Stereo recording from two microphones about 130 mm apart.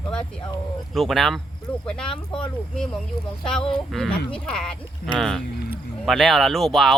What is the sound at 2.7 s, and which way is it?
Speech, 5° left (ahead or behind).